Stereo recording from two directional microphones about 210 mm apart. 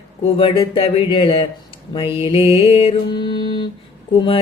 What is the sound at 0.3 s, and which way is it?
Speech, 25° left (ahead or behind).